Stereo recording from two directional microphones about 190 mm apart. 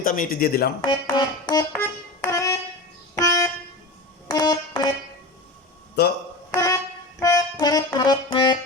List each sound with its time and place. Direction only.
0.0 s speech: 45° left (ahead or behind)
0.9 s music: 20° left (ahead or behind)
3.2 s vehicle horn: 15° left (ahead or behind)
4.3 s music: 20° left (ahead or behind)
6.0 s speech: 60° left (ahead or behind)
6.5 s music: 15° left (ahead or behind)